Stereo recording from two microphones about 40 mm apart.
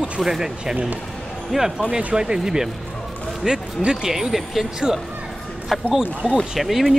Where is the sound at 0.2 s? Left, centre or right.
Centre.